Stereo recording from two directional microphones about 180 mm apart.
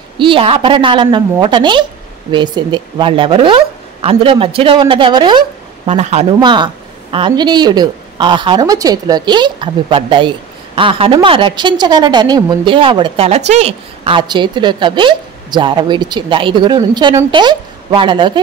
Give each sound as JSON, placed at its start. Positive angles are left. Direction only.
{"t": 0.2, "sound": "speech", "side_deg": -30}
{"t": 5.9, "sound": "speech", "side_deg": -40}
{"t": 6.4, "sound": "speech", "side_deg": -25}